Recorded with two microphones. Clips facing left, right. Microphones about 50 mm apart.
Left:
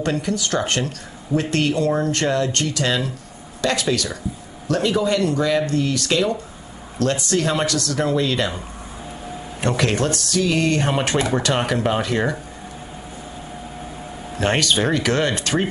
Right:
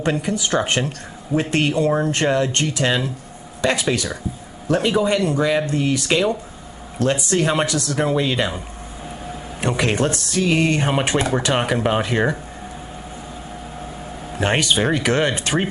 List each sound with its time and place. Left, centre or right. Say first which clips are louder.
0.0 s speech: right 1 dB; centre
14.4 s speech: even; centre